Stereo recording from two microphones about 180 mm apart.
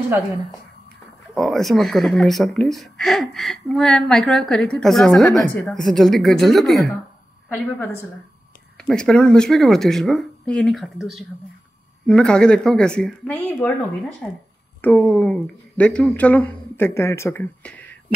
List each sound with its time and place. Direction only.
1.3 s speech: centre (ahead or behind)
7.4 s a woman's voice: 10° left (ahead or behind)
14.8 s a woman's voice: 10° left (ahead or behind)